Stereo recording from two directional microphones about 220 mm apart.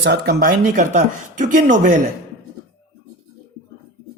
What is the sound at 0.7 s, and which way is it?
Speech, 35° right (ahead or behind).